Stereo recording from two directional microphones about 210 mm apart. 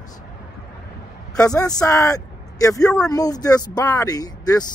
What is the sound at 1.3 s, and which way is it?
Speech, 15° left (ahead or behind).